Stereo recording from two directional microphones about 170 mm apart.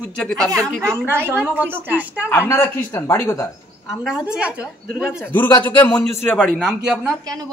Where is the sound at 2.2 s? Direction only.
10° left (ahead or behind).